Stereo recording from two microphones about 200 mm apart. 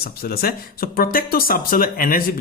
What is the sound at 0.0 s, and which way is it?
Speech, 50° left (ahead or behind).